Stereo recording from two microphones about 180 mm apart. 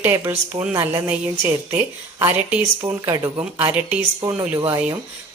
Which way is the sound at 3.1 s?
15° right (ahead or behind).